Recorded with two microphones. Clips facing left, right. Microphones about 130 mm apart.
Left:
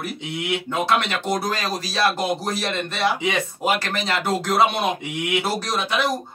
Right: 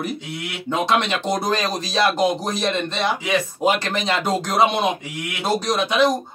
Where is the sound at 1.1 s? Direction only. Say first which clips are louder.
Right 2 dB; 20° right (ahead or behind).